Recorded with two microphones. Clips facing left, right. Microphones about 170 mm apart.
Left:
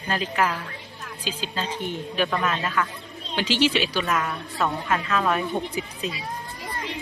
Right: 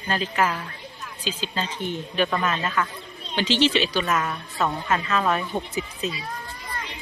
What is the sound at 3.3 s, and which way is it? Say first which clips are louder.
Speech: right 1 dB; 10° left (ahead or behind).